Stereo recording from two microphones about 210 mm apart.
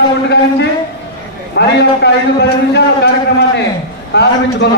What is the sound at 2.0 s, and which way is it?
Speech, 55° left (ahead or behind).